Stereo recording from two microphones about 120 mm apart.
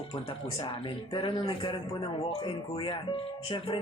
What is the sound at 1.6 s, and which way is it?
Speech, 40° left (ahead or behind).